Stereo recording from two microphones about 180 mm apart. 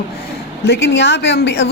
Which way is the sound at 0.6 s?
70° left (ahead or behind).